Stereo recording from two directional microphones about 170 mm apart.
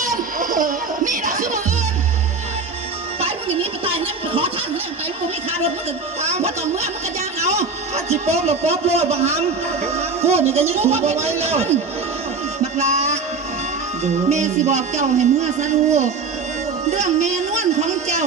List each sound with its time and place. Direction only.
0.0 s music: 50° right (ahead or behind)
3.2 s a sound: 35° right (ahead or behind)
6.2 s music: 40° right (ahead or behind)
12.7 s music: 40° right (ahead or behind)
16.9 s speech: 40° right (ahead or behind)